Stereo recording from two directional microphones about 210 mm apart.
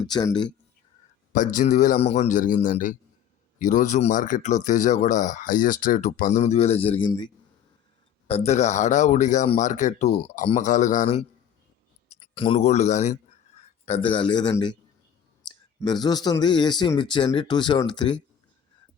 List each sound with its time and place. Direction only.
0.0 s speech: 20° left (ahead or behind)
1.3 s speech: 40° left (ahead or behind)
8.3 s speech: 30° left (ahead or behind)